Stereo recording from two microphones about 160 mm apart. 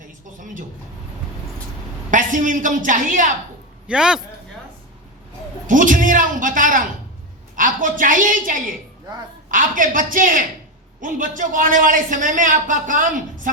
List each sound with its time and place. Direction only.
0.3 s a sound: 55° right (ahead or behind)
2.0 s a woman's voice: 55° right (ahead or behind)
3.8 s a man's voice: 5° right (ahead or behind)
5.6 s a man's voice: 55° right (ahead or behind)